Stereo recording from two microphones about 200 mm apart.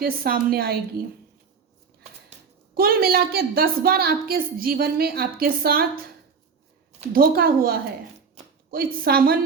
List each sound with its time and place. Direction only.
0.0 s a woman's voice: 45° right (ahead or behind)
2.7 s a woman's voice: 50° right (ahead or behind)
7.0 s a woman's voice: 45° right (ahead or behind)